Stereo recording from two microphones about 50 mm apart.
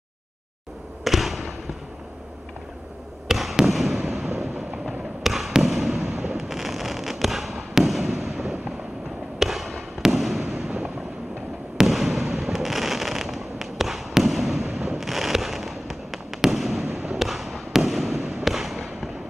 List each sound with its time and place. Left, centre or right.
1.0 s basketball bounce: centre
3.3 s basketball bounce: centre
4.0 s fireworks: centre
11.8 s fireworks: centre
14.7 s fireworks: centre
15.0 s fireworks: centre